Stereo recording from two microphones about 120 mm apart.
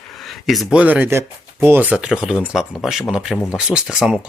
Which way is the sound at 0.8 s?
15° right (ahead or behind).